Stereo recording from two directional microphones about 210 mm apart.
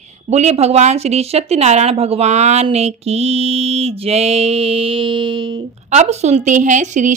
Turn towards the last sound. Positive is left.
turn(degrees=-35)  # may be behind; listen again after turning